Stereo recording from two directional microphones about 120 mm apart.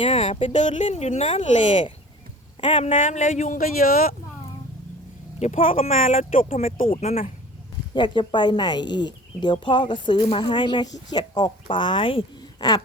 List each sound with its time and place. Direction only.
0.0 s speech: 65° left (ahead or behind)
0.5 s speech: 85° left; by 1.5 s 65° left (ahead or behind)
2.6 s a woman's voice: 45° left (ahead or behind)
2.8 s speech: 85° left
5.4 s speech: 70° left (ahead or behind)
7.9 s speech: 40° left (ahead or behind)